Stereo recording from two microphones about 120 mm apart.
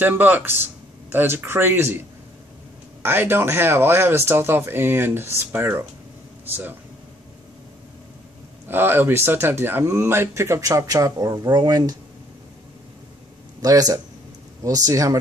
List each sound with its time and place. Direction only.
0.0 s speech: 15° right (ahead or behind)
8.6 s speech: 20° right (ahead or behind)
13.6 s speech: 30° right (ahead or behind)